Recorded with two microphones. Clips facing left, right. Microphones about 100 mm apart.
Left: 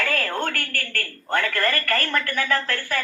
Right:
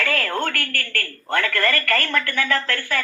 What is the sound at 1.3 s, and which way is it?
Speech, 15° left (ahead or behind).